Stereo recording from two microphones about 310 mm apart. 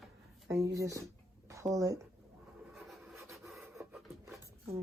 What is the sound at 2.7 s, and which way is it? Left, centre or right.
Rub, centre.